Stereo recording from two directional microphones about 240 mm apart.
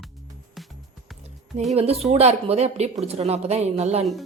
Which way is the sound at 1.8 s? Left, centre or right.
Right.